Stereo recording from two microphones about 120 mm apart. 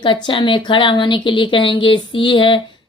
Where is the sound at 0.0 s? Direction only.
45° left (ahead or behind).